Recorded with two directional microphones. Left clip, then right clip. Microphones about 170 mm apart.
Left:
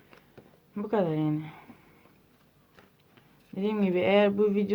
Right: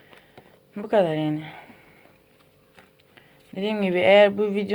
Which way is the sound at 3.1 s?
30° right (ahead or behind).